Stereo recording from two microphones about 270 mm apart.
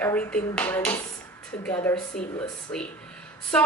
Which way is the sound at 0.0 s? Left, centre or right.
Centre.